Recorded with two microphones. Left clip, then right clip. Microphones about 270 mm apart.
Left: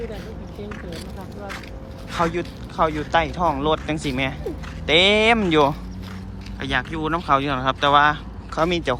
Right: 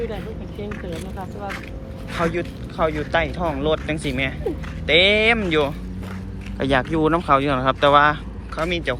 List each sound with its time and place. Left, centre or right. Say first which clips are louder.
2.2 s speech: right 1 dB; centre
6.6 s speech: right 5 dB; centre